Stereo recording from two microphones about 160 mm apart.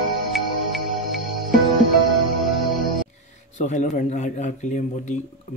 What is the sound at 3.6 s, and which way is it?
Speech, 50° left (ahead or behind).